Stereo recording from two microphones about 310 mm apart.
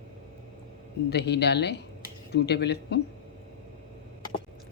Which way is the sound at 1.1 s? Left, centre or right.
Left.